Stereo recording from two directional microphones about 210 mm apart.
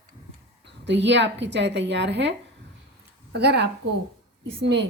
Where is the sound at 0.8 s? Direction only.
55° right (ahead or behind).